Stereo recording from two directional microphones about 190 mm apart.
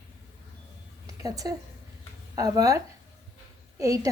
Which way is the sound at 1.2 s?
20° right (ahead or behind).